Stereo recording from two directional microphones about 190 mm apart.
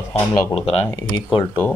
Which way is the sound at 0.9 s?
15° left (ahead or behind).